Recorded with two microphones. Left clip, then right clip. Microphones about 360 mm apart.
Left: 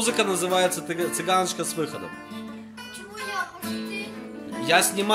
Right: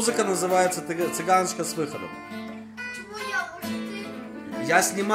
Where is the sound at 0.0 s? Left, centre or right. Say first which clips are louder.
Even; centre.